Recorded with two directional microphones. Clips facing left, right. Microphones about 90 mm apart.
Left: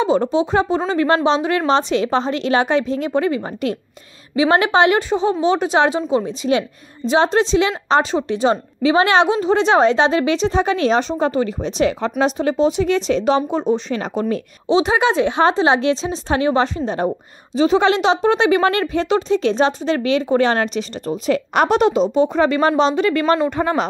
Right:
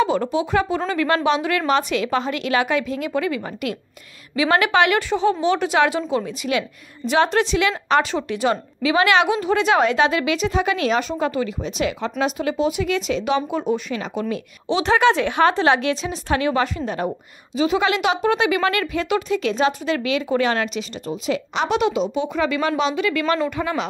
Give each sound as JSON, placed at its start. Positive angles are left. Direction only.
{"t": 0.0, "sound": "a woman's voice", "side_deg": 25}
{"t": 14.7, "sound": "a woman's voice", "side_deg": 20}